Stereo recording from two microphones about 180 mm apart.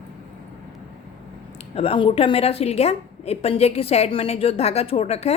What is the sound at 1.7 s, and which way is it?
A woman's voice, 30° left (ahead or behind).